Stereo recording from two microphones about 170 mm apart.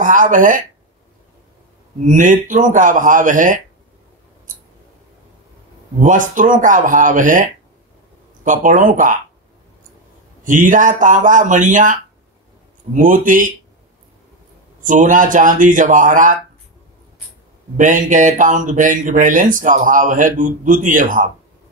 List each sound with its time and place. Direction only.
0.0 s speech: 50° right (ahead or behind)
2.0 s speech: 50° right (ahead or behind)
5.9 s speech: 50° right (ahead or behind)
10.4 s speech: 50° right (ahead or behind)
14.8 s speech: 50° right (ahead or behind)
17.7 s speech: 50° right (ahead or behind)